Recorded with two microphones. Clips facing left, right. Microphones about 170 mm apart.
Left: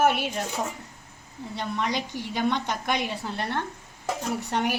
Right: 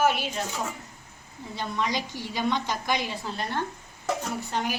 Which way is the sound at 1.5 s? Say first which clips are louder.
Left 1 dB; 60° left (ahead or behind).